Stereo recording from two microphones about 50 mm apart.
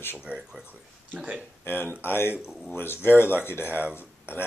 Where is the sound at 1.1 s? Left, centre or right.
Right.